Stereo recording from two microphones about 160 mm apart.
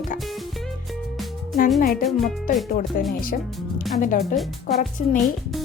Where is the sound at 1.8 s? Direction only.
65° left (ahead or behind).